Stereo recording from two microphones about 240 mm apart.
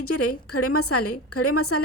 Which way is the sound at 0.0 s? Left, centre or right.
Left.